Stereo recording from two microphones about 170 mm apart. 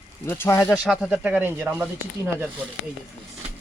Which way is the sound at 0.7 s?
5° right (ahead or behind).